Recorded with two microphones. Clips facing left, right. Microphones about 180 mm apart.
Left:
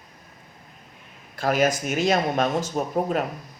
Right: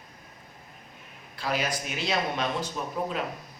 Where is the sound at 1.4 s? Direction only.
45° left (ahead or behind).